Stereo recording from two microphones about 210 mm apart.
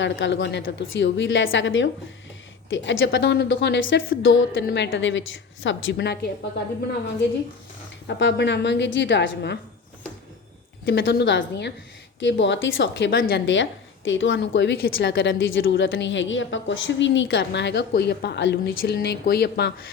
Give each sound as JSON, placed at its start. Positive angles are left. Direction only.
{"t": 0.0, "sound": "a woman's voice", "side_deg": 60}
{"t": 8.0, "sound": "a woman's voice", "side_deg": 55}
{"t": 11.0, "sound": "a woman's voice", "side_deg": 55}
{"t": 13.4, "sound": "a woman's voice", "side_deg": 60}